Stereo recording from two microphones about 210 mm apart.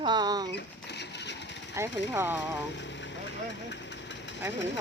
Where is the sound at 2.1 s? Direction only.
10° right (ahead or behind).